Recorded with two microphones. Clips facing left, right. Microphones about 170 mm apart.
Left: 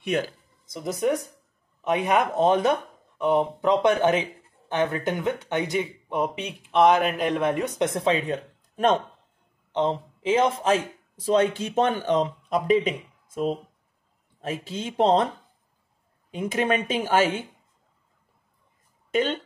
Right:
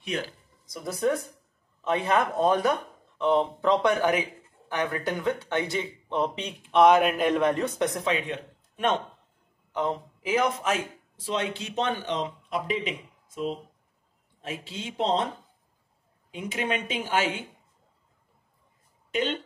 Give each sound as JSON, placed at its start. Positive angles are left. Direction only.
{"t": 0.0, "sound": "speech", "side_deg": 50}
{"t": 0.7, "sound": "speech", "side_deg": 20}
{"t": 7.9, "sound": "speech", "side_deg": 35}
{"t": 9.7, "sound": "a man's voice", "side_deg": 25}
{"t": 11.1, "sound": "speech", "side_deg": 45}
{"t": 16.3, "sound": "speech", "side_deg": 45}